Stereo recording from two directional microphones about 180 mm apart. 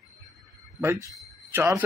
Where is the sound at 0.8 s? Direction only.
15° right (ahead or behind).